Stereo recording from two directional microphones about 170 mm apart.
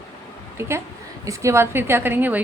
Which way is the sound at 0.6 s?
15° right (ahead or behind).